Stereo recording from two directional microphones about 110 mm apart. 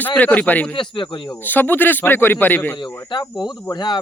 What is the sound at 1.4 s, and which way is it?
Speech, 20° left (ahead or behind).